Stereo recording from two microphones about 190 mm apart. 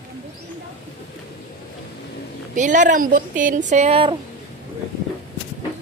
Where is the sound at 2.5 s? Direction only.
40° right (ahead or behind).